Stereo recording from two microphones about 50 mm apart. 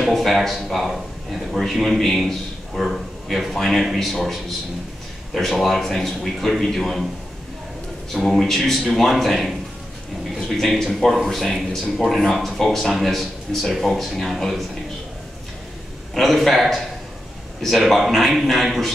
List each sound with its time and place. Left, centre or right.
0.0 s speech: centre
8.1 s speech: centre
16.2 s speech: centre